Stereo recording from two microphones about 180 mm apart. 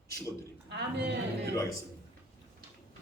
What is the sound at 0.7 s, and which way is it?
Speech, 70° right (ahead or behind).